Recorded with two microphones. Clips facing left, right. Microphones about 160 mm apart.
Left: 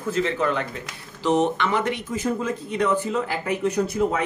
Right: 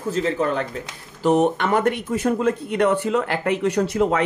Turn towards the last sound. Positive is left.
turn(degrees=-75)  # may be behind; listen again after turning